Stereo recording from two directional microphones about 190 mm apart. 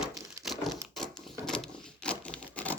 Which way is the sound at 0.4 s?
Centre (ahead or behind).